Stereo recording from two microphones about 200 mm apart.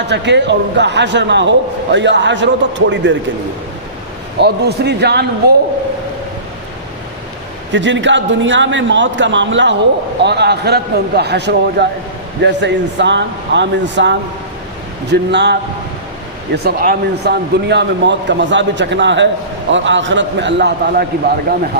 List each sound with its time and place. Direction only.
0.1 s a man's voice: 60° right (ahead or behind)
4.4 s a man's voice: 55° right (ahead or behind)
7.7 s a man's voice: 65° right (ahead or behind)
16.6 s a man's voice: 50° right (ahead or behind)